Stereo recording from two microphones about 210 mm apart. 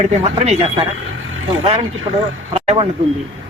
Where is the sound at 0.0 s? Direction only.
30° right (ahead or behind).